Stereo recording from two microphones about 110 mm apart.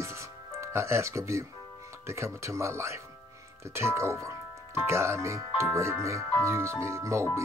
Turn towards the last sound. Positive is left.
turn(degrees=-25)  # may be behind; listen again after turning